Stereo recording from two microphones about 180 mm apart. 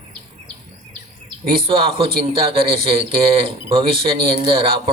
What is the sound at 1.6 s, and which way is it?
Speech, 30° right (ahead or behind).